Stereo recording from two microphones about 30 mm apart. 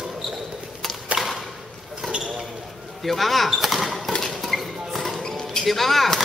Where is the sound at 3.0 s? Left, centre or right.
Centre.